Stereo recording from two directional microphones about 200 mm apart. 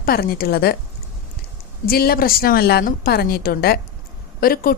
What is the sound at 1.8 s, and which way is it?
Speech, 50° left (ahead or behind).